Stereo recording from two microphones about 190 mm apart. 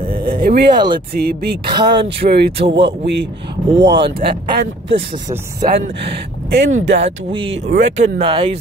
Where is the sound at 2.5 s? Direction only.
30° right (ahead or behind).